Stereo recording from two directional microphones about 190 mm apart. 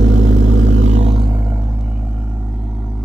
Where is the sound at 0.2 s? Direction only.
35° right (ahead or behind).